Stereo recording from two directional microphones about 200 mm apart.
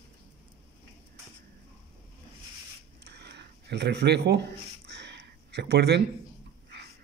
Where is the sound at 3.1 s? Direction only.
55° right (ahead or behind).